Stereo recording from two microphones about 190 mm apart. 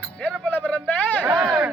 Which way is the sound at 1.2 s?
5° right (ahead or behind).